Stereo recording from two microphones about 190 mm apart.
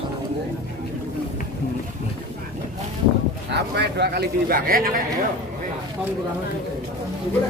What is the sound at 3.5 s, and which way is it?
Speech, 60° right (ahead or behind).